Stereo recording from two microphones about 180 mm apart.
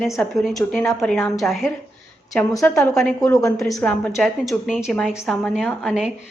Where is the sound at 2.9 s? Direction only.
Centre (ahead or behind).